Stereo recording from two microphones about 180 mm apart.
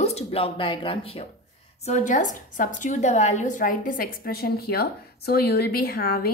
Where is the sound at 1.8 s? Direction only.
40° left (ahead or behind).